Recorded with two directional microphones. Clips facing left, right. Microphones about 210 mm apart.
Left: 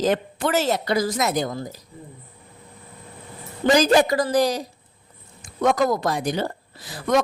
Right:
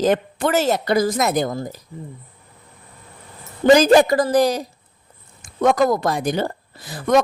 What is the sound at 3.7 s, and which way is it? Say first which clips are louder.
Speech: right 1 dB; 50° right (ahead or behind).